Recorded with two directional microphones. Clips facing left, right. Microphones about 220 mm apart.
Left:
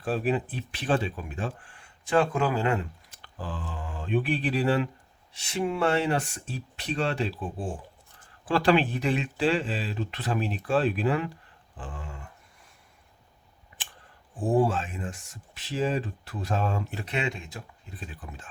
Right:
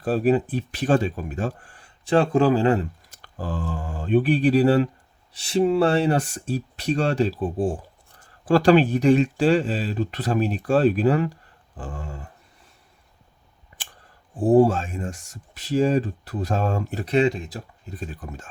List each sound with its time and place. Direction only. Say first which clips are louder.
0.0 s speech: right 7 dB; 40° right (ahead or behind)
13.7 s a sound: right 2 dB; 40° right (ahead or behind)
14.3 s speech: right 8 dB; 40° right (ahead or behind)